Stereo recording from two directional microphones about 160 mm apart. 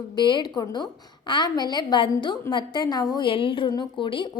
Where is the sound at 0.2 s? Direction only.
30° left (ahead or behind).